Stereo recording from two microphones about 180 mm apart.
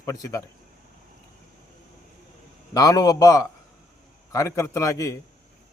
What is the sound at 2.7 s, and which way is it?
A man's voice, 20° left (ahead or behind).